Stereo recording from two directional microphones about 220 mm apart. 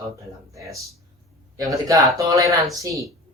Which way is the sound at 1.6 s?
15° right (ahead or behind).